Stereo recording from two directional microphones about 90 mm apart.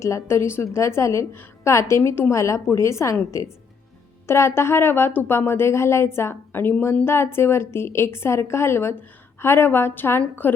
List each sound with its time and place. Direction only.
0.0 s a woman's voice: 30° left (ahead or behind)